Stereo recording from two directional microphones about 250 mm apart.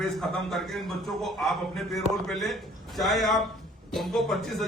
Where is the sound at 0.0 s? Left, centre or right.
Centre.